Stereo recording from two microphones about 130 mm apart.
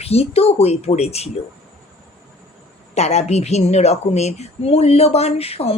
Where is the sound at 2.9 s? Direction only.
55° left (ahead or behind).